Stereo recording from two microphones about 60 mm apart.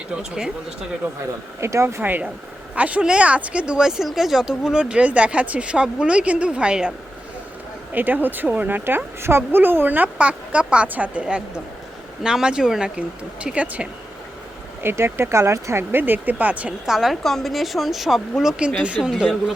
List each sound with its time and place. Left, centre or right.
0.2 s speech: centre
1.6 s speech: right
2.0 s speech: right
7.9 s speech: right
14.8 s speech: right
15.8 s speech: right
16.8 s speech: centre
18.6 s speech: centre